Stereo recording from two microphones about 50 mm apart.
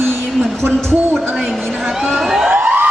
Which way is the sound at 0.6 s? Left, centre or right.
Right.